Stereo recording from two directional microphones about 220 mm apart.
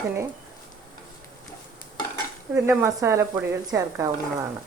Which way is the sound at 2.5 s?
15° right (ahead or behind).